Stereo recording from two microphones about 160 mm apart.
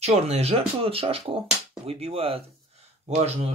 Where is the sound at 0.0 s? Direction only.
40° right (ahead or behind).